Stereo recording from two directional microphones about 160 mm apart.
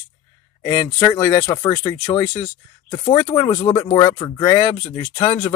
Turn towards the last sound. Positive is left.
turn(degrees=30)  # may be behind; listen again after turning